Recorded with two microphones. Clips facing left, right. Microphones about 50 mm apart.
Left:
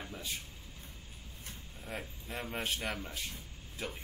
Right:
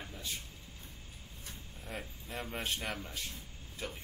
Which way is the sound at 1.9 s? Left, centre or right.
Centre.